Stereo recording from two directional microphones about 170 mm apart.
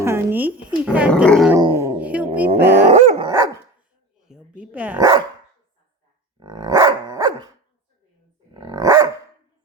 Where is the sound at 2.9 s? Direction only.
35° right (ahead or behind).